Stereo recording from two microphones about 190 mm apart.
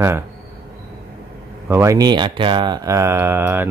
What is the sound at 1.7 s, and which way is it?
Speech, 15° right (ahead or behind).